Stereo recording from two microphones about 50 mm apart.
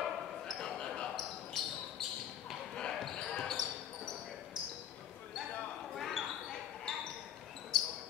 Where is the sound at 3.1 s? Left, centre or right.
Centre.